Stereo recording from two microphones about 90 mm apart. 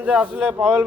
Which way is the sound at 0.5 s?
25° right (ahead or behind).